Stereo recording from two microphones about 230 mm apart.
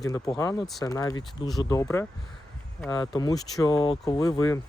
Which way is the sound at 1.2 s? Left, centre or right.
Centre.